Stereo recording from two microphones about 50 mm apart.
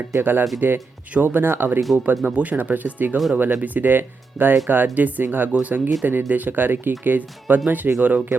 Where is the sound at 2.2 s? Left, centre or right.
Right.